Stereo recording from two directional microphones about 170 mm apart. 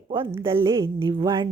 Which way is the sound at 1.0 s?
25° right (ahead or behind).